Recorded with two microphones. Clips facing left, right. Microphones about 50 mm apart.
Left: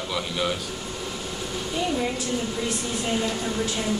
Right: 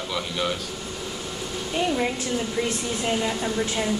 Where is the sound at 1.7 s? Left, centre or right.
Right.